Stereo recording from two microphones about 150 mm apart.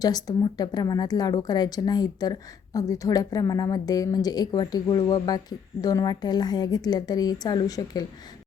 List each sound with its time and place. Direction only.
0.0 s speech: 25° left (ahead or behind)